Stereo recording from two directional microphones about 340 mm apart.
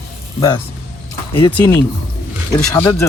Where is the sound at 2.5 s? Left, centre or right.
Centre.